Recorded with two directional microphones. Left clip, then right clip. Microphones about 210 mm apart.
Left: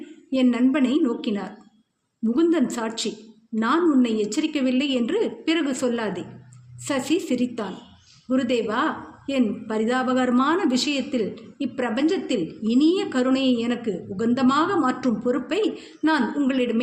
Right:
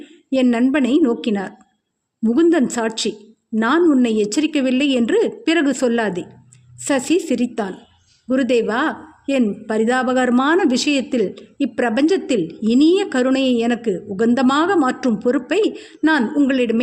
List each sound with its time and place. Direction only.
0.3 s a woman's voice: 50° right (ahead or behind)